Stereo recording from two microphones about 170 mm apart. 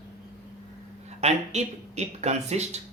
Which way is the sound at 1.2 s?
40° right (ahead or behind).